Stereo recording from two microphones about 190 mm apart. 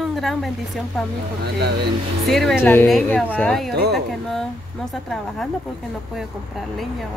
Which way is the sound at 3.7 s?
60° right (ahead or behind).